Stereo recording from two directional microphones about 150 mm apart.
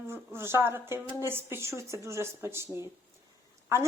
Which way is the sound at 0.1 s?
15° right (ahead or behind).